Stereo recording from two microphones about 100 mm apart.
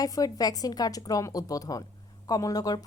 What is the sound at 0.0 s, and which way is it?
Speech, 35° left (ahead or behind).